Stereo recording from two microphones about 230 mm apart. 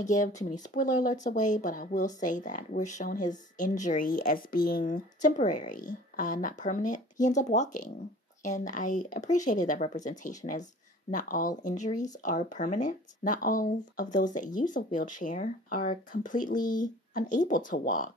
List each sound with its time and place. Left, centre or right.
0.0 s speech: left